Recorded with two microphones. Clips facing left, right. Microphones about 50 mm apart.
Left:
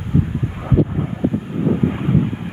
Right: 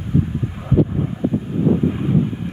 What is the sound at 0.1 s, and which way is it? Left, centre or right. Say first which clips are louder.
Vehicle: left 1 dB; centre.